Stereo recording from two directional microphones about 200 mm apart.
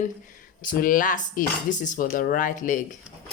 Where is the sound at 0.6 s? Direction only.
45° left (ahead or behind).